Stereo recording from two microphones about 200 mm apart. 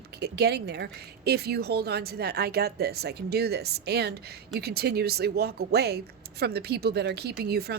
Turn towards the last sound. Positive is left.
turn(degrees=-50)  # may be behind; listen again after turning